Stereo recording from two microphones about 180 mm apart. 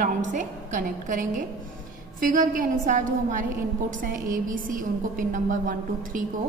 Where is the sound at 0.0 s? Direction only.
45° right (ahead or behind).